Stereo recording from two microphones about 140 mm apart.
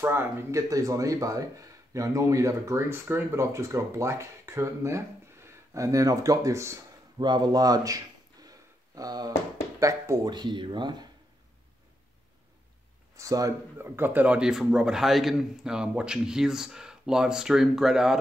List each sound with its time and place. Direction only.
0.0 s speech: 15° right (ahead or behind)
7.2 s a sound: 30° right (ahead or behind)
9.8 s speech: 25° right (ahead or behind)
13.1 s speech: 25° right (ahead or behind); by 18.2 s 5° right (ahead or behind)